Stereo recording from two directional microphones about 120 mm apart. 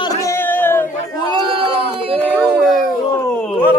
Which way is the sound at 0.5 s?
15° left (ahead or behind).